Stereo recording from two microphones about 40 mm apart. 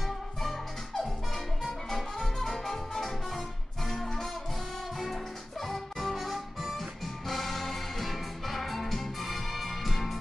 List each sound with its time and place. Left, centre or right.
0.4 s music: centre